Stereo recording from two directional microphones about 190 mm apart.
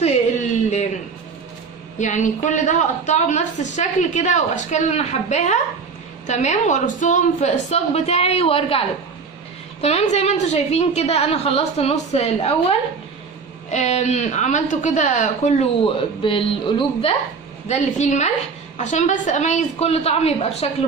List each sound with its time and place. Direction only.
2.0 s a woman's voice: 40° left (ahead or behind)
17.6 s a woman's voice: 40° left (ahead or behind)